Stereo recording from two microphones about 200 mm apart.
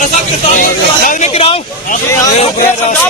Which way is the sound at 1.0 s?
30° left (ahead or behind).